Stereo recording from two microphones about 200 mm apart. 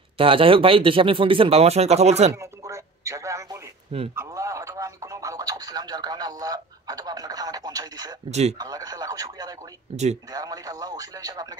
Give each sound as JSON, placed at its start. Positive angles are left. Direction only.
{"t": 0.2, "sound": "speech", "side_deg": -25}
{"t": 2.3, "sound": "a sound", "side_deg": -15}
{"t": 4.1, "sound": "radio", "side_deg": -15}
{"t": 8.3, "sound": "speech", "side_deg": -35}
{"t": 8.5, "sound": "speech", "side_deg": -20}
{"t": 10.3, "sound": "speech", "side_deg": -20}